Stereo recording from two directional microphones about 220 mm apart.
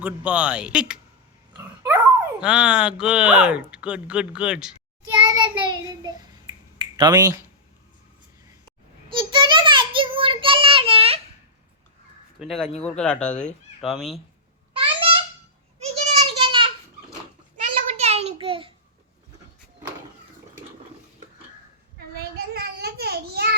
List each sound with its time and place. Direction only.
0.0 s a man's voice: 5° right (ahead or behind)
2.4 s a man's voice: 5° right (ahead or behind)
5.1 s child singing: 15° right (ahead or behind)
6.9 s speech: 20° right (ahead or behind)
9.0 s child singing: 20° right (ahead or behind)
12.4 s a man's voice: centre (ahead or behind)
14.7 s a sound: 25° right (ahead or behind)
22.4 s child singing: 45° right (ahead or behind)